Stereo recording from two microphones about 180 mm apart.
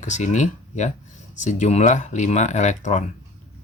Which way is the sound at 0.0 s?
40° left (ahead or behind).